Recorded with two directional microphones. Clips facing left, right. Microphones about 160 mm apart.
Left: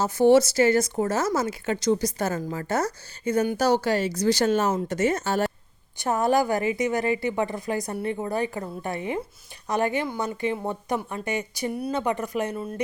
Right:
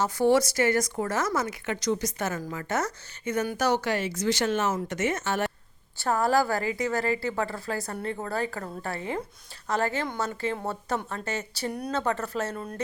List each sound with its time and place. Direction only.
0.0 s speech: 25° left (ahead or behind)
6.0 s speech: 20° left (ahead or behind)